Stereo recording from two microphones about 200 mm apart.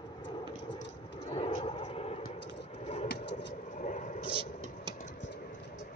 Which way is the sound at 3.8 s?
40° left (ahead or behind).